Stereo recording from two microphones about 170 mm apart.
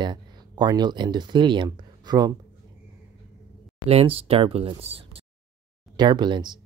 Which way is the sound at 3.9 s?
35° right (ahead or behind).